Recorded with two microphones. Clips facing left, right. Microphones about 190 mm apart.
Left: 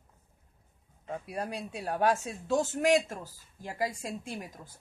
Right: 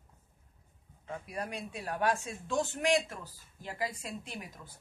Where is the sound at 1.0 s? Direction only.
35° left (ahead or behind).